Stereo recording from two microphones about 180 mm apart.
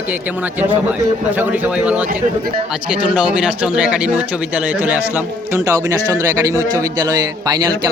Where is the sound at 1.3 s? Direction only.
10° right (ahead or behind).